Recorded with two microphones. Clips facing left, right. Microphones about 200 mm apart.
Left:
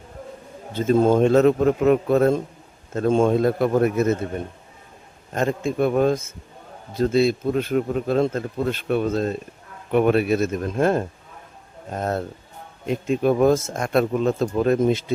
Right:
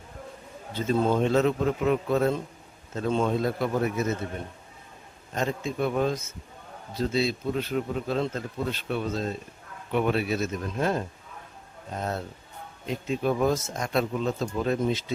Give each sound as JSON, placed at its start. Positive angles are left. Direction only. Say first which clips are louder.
{"t": 0.8, "sound": "a man's voice", "louder": "left 7 dB", "side_deg": 50}
{"t": 5.3, "sound": "a man's voice", "louder": "left 6 dB", "side_deg": 55}